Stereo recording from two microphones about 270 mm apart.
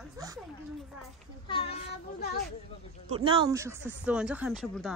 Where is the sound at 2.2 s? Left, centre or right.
Left.